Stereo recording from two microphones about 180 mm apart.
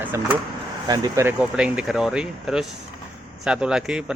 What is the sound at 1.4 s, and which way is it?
A man's voice, 5° right (ahead or behind).